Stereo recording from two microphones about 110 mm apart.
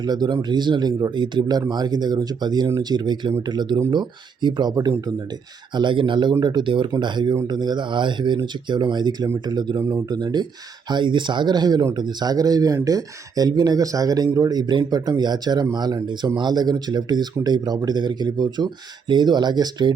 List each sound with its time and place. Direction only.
0.0 s speech: 40° right (ahead or behind)